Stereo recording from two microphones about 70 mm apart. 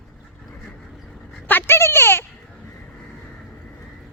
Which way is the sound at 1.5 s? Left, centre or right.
Left.